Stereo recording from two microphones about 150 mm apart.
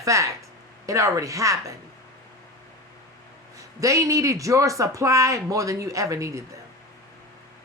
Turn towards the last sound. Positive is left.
turn(degrees=-20)  # may be behind; listen again after turning